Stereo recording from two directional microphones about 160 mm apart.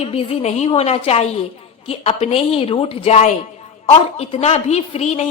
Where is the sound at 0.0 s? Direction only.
40° left (ahead or behind).